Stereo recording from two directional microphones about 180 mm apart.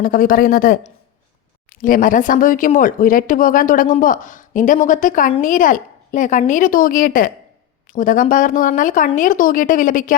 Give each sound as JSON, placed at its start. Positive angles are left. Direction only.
{"t": 0.0, "sound": "a woman's voice", "side_deg": 50}